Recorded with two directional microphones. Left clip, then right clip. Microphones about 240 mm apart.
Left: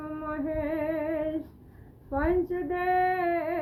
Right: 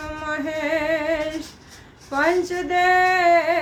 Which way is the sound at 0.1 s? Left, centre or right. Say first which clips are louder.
Right 6 dB; centre.